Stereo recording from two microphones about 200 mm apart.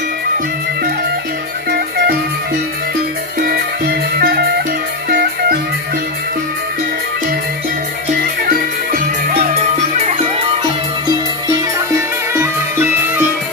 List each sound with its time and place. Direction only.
1.7 s music: 50° right (ahead or behind)
3.3 s music: 50° right (ahead or behind)
9.9 s music: 35° right (ahead or behind)
12.4 s music: 10° right (ahead or behind)